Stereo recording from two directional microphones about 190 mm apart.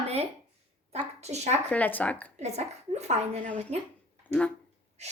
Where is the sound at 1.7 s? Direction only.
10° left (ahead or behind).